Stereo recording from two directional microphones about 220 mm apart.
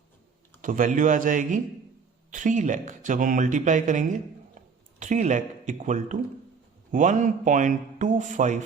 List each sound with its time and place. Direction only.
0.6 s speech: 35° right (ahead or behind)